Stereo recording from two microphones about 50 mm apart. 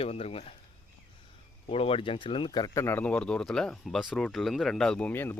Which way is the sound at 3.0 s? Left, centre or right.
Left.